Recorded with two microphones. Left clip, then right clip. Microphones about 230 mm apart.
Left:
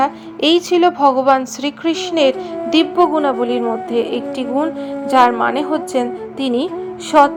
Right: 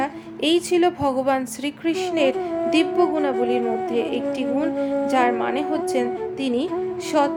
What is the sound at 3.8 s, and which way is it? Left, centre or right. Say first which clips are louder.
Speech: left 4 dB; centre.